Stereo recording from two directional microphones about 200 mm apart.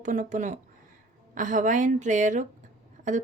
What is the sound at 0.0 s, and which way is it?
Speech, 40° right (ahead or behind).